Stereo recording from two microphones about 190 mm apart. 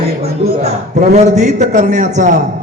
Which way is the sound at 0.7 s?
35° right (ahead or behind).